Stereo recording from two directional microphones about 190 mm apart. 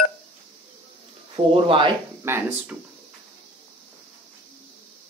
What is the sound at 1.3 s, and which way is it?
Speech, 25° right (ahead or behind).